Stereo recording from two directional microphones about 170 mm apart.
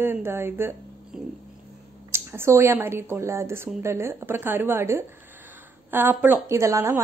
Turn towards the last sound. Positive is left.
turn(degrees=-15)  # may be behind; listen again after turning